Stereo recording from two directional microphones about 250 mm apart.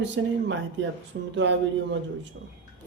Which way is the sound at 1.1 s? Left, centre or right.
Right.